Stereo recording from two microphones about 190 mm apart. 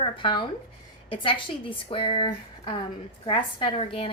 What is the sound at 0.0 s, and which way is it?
A woman's voice, 25° left (ahead or behind).